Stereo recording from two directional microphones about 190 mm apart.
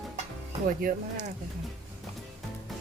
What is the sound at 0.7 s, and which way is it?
Speech, 40° right (ahead or behind).